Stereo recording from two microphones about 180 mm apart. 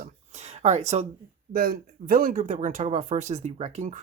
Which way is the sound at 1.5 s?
55° right (ahead or behind).